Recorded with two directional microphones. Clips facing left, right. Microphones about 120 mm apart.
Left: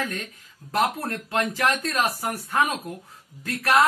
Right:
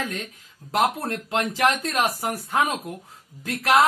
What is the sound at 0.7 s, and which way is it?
Speech, 15° right (ahead or behind).